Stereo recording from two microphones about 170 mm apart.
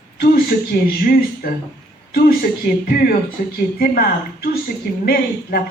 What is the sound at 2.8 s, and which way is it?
Speech, 65° left (ahead or behind).